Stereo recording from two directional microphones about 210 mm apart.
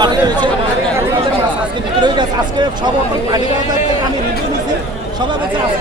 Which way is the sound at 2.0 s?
20° right (ahead or behind).